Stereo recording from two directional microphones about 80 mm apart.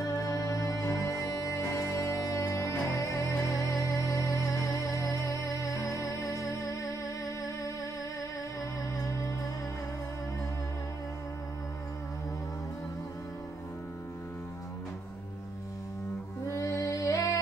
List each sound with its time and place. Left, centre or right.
0.0 s music: left
8.9 s music: left
16.4 s music: left